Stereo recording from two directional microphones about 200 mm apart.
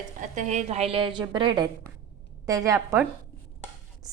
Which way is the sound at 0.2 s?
35° right (ahead or behind).